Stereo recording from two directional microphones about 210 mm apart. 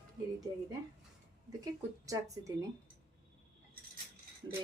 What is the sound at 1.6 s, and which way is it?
Speech, 15° right (ahead or behind).